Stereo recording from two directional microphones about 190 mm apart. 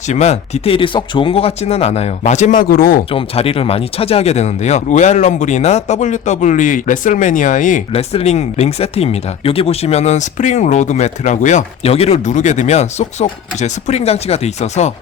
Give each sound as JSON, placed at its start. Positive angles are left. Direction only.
{"t": 0.1, "sound": "speech", "side_deg": 35}
{"t": 3.1, "sound": "speech", "side_deg": 30}